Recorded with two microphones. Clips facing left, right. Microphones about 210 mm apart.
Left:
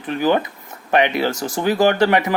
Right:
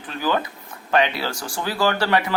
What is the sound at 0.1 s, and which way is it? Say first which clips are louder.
Speech: left 6 dB; 20° left (ahead or behind).